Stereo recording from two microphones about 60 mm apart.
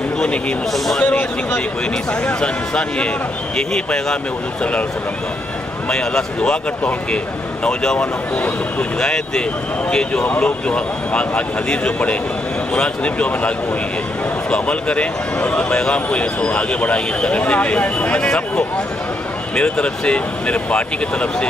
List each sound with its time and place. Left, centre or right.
0.2 s speech: centre
0.7 s speech: centre
2.2 s speech: centre
5.9 s speech: centre
7.6 s a man's voice: centre
14.5 s a man's voice: centre
19.5 s speech: centre